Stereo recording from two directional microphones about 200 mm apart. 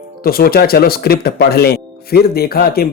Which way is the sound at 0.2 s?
50° left (ahead or behind).